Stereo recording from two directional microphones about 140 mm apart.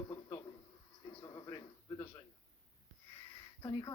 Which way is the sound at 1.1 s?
30° left (ahead or behind).